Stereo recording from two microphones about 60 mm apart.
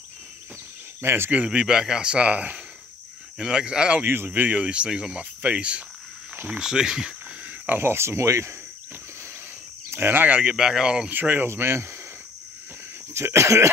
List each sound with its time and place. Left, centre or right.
1.0 s speech: right
1.3 s speech: right
4.0 s speech: right
4.3 s speech: right
6.3 s cricket: right
6.6 s speech: centre
7.4 s a sound: right
7.8 s speech: right
9.8 s speech: right
10.5 s speech: centre
11.1 s speech: right
13.1 s speech: right